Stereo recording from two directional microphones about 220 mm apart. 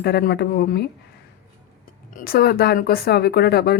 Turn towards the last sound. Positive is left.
turn(degrees=45)  # may be behind; listen again after turning